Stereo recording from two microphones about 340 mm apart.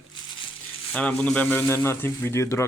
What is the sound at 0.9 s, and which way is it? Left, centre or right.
Speech, centre.